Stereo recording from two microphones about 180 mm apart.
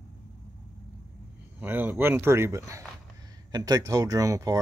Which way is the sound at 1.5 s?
10° right (ahead or behind).